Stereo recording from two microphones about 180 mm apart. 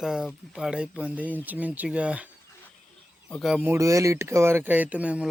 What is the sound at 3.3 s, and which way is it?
Speech, centre (ahead or behind).